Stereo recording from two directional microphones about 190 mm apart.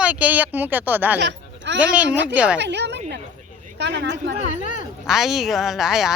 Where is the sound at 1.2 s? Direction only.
65° right (ahead or behind).